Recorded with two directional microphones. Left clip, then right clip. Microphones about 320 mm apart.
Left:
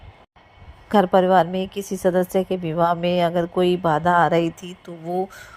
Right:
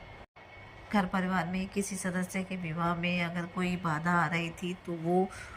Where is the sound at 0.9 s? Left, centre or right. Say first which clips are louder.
Left 16 dB; left.